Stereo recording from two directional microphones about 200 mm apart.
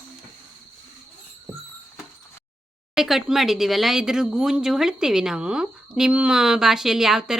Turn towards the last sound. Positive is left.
turn(degrees=0)  # may be behind; listen again after turning